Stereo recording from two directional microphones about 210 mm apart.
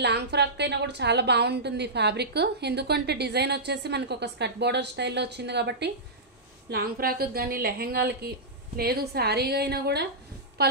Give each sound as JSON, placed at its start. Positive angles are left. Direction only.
{"t": 0.0, "sound": "a woman's voice", "side_deg": -55}